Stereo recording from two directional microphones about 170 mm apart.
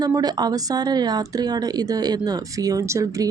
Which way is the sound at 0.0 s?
25° right (ahead or behind).